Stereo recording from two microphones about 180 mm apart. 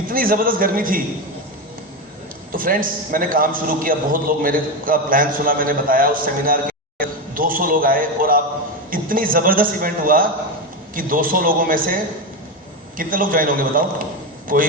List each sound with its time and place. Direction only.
0.1 s a man's voice: 50° right (ahead or behind)
2.5 s a man's voice: 50° right (ahead or behind)
13.0 s a man's voice: 50° right (ahead or behind)